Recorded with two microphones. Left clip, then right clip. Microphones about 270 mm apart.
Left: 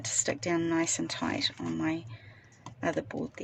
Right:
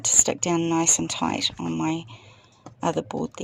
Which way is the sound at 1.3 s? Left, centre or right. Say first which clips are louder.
Right 6 dB; centre.